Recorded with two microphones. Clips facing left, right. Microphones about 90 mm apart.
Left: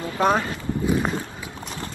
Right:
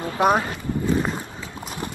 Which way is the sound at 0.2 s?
15° right (ahead or behind).